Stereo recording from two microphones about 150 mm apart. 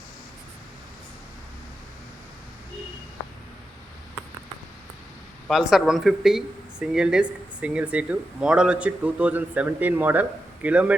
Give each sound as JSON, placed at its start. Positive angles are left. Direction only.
{"t": 5.5, "sound": "speech", "side_deg": 0}